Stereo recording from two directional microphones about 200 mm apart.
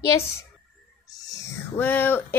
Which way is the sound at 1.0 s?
15° left (ahead or behind).